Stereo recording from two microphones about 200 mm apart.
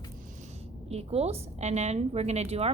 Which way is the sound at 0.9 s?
30° right (ahead or behind).